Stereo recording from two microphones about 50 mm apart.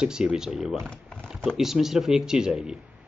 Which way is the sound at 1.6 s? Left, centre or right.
Centre.